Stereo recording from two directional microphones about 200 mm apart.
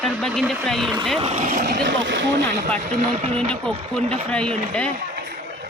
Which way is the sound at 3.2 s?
30° right (ahead or behind).